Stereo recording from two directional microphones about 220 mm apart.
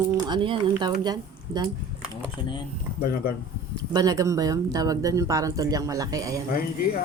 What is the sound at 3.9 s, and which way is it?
Speech, 15° right (ahead or behind).